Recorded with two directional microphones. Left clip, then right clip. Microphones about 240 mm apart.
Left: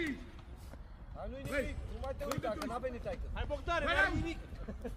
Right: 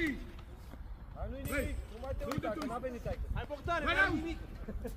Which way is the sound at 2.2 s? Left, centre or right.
Left.